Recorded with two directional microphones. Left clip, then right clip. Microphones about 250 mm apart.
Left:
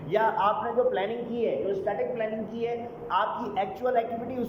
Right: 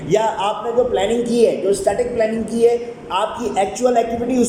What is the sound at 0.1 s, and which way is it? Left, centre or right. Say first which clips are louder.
A man's voice: right 6 dB; centre.